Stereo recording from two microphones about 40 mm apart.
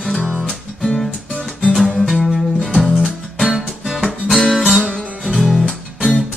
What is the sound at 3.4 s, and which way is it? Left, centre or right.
Music, centre.